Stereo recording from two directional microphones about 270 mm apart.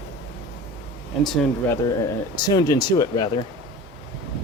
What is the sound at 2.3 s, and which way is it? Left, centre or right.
Speech, centre.